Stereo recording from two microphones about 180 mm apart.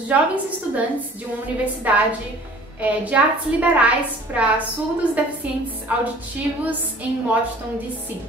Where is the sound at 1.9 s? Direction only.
10° right (ahead or behind).